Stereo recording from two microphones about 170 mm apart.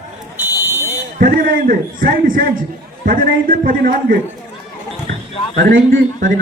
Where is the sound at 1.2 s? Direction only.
55° right (ahead or behind).